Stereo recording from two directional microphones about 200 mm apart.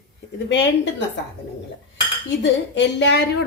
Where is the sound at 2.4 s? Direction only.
60° left (ahead or behind).